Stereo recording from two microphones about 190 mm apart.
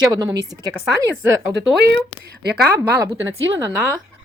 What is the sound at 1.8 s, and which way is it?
Speech, 60° right (ahead or behind).